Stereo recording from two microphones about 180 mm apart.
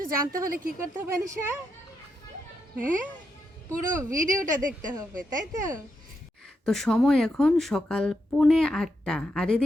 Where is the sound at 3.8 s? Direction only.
50° right (ahead or behind).